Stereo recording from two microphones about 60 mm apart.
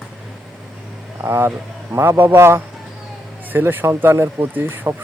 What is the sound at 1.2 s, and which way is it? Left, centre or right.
Speech, right.